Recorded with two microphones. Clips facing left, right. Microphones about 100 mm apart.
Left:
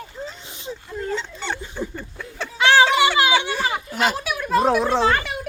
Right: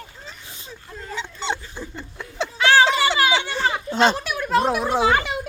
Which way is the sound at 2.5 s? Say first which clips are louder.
Left 1 dB; 20° left (ahead or behind).